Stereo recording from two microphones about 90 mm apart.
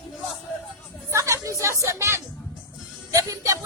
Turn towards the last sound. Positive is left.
turn(degrees=-35)  # may be behind; listen again after turning